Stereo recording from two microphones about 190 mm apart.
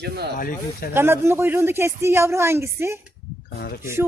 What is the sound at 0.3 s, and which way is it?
Speech, 50° left (ahead or behind).